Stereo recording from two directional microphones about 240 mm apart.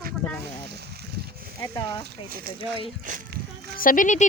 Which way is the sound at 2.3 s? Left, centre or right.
Right.